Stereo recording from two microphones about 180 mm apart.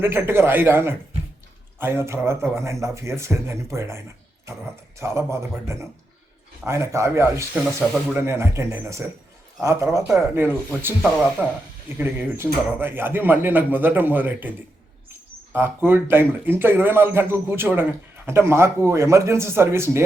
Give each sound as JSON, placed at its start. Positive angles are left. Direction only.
{"t": 0.0, "sound": "speech", "side_deg": -15}
{"t": 15.5, "sound": "speech", "side_deg": -10}